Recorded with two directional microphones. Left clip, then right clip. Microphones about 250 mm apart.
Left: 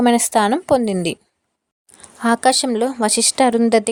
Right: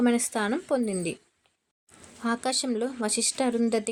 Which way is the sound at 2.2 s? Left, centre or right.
Left.